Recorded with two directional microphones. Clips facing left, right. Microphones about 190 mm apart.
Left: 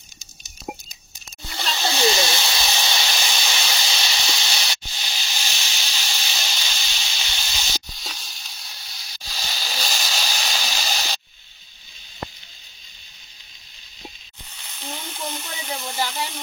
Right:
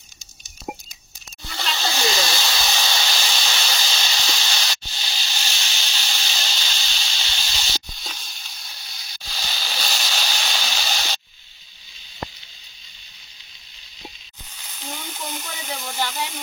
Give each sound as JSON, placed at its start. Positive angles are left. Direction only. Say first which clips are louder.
{"t": 1.6, "sound": "snake", "louder": "left 3 dB", "side_deg": 25}
{"t": 2.4, "sound": "hiss", "louder": "even", "side_deg": 0}
{"t": 2.7, "sound": "hiss", "louder": "even", "side_deg": 20}
{"t": 3.0, "sound": "hiss", "louder": "even", "side_deg": 0}
{"t": 14.6, "sound": "frying", "louder": "even", "side_deg": 0}